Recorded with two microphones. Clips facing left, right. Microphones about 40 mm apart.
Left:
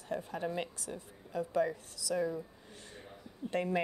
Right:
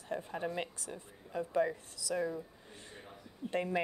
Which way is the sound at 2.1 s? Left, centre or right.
Centre.